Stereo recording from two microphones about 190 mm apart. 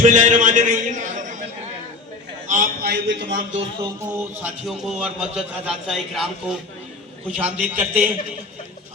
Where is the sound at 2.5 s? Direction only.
50° right (ahead or behind); by 3.6 s 70° right (ahead or behind).